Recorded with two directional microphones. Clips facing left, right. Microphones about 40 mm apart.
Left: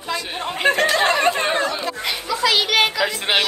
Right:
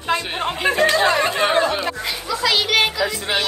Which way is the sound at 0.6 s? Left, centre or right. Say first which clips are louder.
Left 1 dB; left.